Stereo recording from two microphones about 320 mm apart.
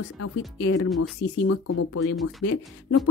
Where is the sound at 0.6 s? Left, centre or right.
Left.